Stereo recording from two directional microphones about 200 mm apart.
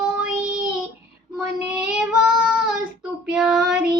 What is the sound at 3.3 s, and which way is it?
Child singing, centre (ahead or behind).